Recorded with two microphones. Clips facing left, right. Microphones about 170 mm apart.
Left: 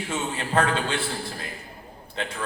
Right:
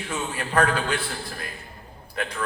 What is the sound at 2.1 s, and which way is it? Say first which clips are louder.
Speech: right 1 dB; 25° left (ahead or behind).